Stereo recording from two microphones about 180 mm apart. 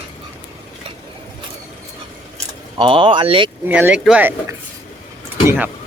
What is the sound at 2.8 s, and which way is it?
Speech, 30° right (ahead or behind).